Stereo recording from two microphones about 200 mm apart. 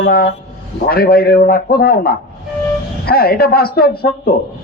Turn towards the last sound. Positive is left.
turn(degrees=50)  # may be behind; listen again after turning